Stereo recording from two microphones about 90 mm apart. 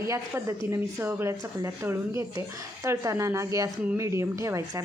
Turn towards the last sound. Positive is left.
turn(degrees=-35)  # may be behind; listen again after turning